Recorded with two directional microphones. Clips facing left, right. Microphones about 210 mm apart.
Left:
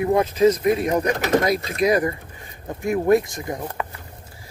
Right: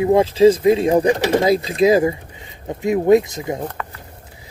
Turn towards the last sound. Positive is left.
turn(degrees=-20)  # may be behind; listen again after turning